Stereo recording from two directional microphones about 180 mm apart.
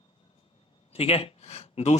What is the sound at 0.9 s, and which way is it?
Speech, 30° left (ahead or behind).